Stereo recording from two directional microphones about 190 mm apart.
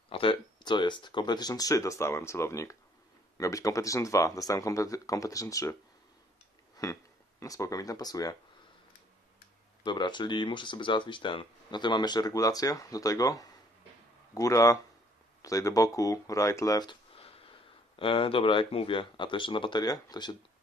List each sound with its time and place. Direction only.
0.1 s speech: 30° left (ahead or behind)
6.8 s speech: 15° left (ahead or behind)
9.8 s speech: 25° left (ahead or behind)